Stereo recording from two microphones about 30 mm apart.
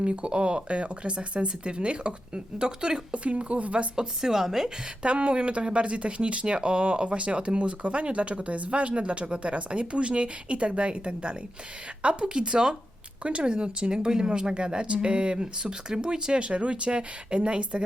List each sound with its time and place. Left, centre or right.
0.0 s speech: right
3.1 s speech: right
4.2 s speech: centre
5.0 s speech: right